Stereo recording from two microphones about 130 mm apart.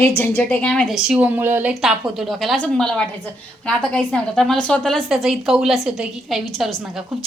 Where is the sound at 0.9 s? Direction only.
5° right (ahead or behind).